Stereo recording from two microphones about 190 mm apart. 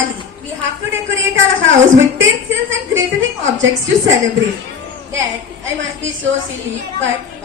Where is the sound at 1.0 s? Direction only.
90° right.